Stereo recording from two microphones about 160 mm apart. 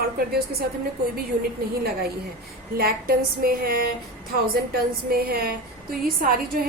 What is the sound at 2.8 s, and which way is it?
A woman's voice, 70° right (ahead or behind).